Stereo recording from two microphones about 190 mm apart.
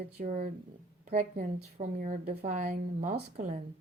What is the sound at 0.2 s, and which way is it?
A woman's voice, 40° right (ahead or behind).